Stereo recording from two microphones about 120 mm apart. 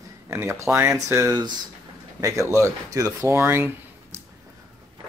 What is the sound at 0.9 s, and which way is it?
Speech, 30° right (ahead or behind).